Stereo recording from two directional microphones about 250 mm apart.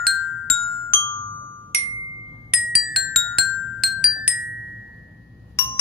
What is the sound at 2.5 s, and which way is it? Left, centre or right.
Marimba, centre.